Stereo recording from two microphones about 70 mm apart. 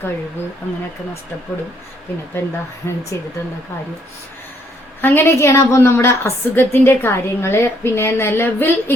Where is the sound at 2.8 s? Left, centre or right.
Left.